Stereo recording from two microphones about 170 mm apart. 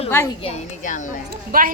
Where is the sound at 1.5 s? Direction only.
55° right (ahead or behind).